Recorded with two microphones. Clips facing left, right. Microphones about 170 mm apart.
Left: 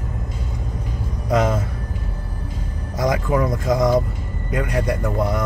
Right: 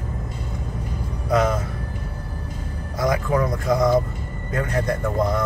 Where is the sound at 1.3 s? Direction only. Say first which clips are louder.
Left 1 dB; 20° left (ahead or behind).